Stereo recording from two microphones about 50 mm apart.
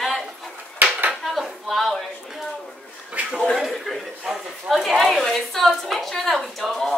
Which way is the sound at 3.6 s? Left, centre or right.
Centre.